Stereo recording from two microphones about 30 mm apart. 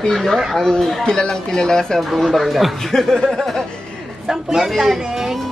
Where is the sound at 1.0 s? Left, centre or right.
Left.